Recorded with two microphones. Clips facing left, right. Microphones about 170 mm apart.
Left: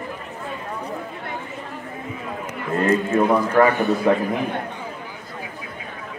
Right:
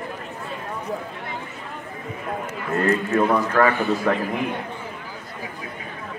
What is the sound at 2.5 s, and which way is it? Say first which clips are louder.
A man's voice: left 2 dB; 20° left (ahead or behind).